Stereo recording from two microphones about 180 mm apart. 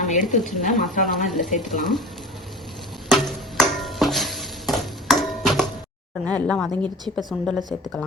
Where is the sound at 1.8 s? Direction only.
Centre (ahead or behind).